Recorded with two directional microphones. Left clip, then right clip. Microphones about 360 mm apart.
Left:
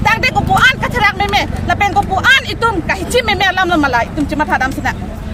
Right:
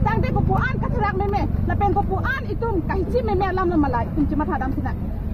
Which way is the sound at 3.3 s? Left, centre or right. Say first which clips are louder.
Left 11 dB; centre.